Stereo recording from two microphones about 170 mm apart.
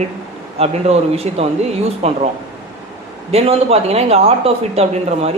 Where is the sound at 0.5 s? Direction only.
35° right (ahead or behind).